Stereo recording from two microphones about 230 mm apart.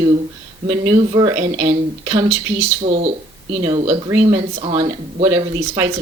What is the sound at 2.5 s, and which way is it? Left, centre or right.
Speech, right.